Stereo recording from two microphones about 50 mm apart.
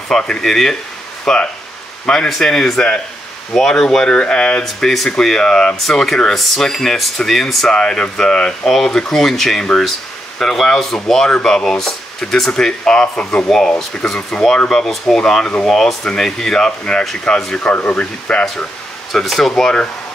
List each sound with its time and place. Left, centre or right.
0.1 s speech: centre
4.7 s speech: centre
7.7 s speech: centre
13.5 s speech: centre
17.8 s speech: left
19.1 s speech: centre